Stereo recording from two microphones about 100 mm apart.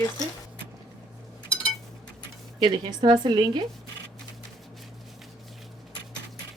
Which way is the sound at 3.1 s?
50° right (ahead or behind).